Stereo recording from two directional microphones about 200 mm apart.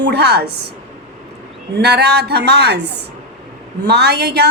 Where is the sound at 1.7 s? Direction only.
55° right (ahead or behind).